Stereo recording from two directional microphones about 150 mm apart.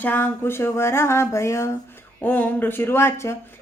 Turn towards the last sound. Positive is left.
turn(degrees=15)  # may be behind; listen again after turning